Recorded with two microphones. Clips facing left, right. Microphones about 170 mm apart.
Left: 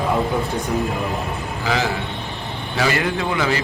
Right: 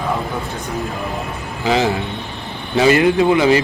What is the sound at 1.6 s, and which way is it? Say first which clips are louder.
A man's voice: right 6 dB; 20° right (ahead or behind).